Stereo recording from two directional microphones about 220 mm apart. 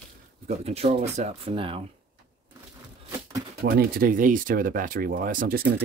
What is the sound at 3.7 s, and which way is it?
Speech, 40° right (ahead or behind).